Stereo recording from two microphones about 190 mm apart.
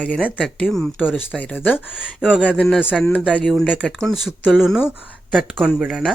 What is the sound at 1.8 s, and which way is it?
Speech, 5° right (ahead or behind).